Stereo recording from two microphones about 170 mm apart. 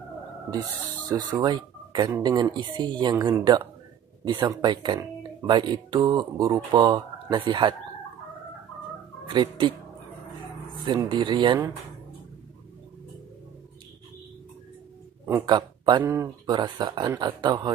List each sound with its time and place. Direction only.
1.0 s a woman's voice: 25° right (ahead or behind)
9.3 s a woman's voice: 30° right (ahead or behind)
10.9 s a woman's voice: 25° right (ahead or behind)
15.4 s speech: 30° right (ahead or behind)
16.0 s speech: 15° right (ahead or behind)
16.5 s a woman's voice: 25° right (ahead or behind)